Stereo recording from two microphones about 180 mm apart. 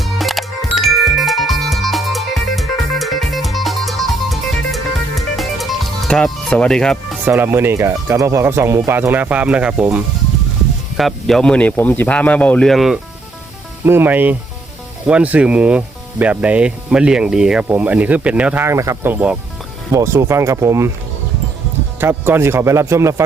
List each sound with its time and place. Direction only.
0.0 s music: centre (ahead or behind)
6.1 s speech: 5° left (ahead or behind)
7.3 s speech: 10° right (ahead or behind)
13.8 s speech: 10° right (ahead or behind)
22.0 s speech: 10° right (ahead or behind)